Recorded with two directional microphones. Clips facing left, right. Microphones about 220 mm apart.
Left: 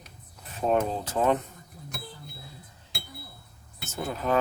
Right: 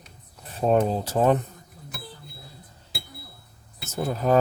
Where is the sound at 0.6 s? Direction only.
35° right (ahead or behind).